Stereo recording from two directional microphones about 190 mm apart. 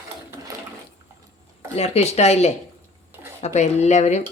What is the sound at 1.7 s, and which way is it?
Speech, 35° left (ahead or behind).